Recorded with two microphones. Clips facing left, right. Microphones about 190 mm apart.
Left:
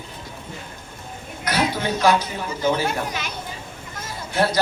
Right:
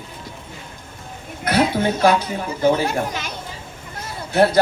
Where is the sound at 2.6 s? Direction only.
55° right (ahead or behind).